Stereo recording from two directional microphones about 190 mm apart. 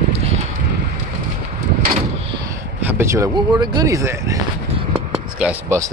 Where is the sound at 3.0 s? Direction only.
15° right (ahead or behind).